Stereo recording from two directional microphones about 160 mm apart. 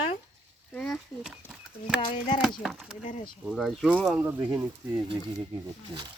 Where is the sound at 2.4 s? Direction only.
Centre (ahead or behind).